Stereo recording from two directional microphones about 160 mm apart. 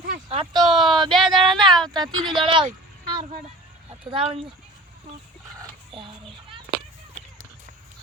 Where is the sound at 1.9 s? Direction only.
30° right (ahead or behind).